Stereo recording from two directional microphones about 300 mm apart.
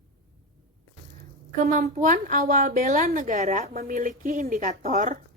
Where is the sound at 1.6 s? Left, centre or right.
Right.